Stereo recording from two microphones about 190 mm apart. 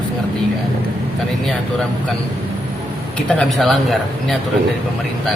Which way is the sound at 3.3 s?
Centre (ahead or behind).